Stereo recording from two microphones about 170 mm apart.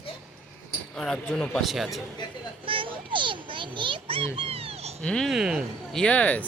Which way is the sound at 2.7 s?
30° right (ahead or behind).